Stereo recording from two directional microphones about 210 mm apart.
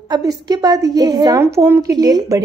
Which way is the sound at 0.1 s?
20° right (ahead or behind).